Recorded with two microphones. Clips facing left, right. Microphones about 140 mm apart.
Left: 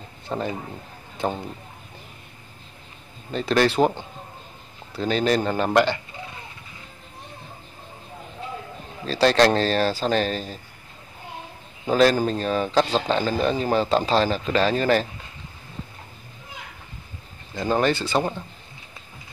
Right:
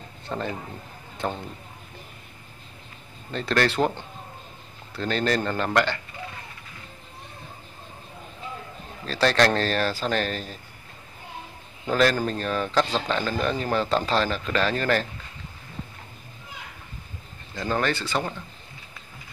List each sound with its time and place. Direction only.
0.3 s a man's voice: 15° left (ahead or behind)
3.3 s a man's voice: 10° left (ahead or behind)
9.0 s speech: 25° left (ahead or behind)
11.8 s speech: 20° left (ahead or behind)
17.6 s speech: 20° left (ahead or behind)